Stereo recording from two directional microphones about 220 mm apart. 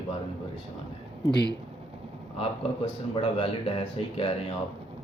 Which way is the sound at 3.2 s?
25° left (ahead or behind).